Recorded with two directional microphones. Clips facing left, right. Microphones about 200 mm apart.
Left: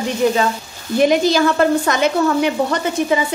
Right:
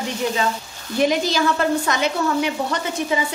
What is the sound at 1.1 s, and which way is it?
A woman's voice, 55° left (ahead or behind).